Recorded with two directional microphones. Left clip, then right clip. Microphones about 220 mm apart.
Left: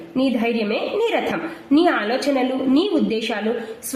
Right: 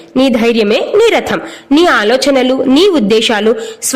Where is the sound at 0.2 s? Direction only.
45° right (ahead or behind).